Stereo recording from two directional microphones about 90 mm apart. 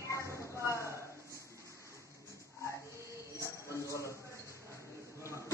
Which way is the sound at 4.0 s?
30° right (ahead or behind).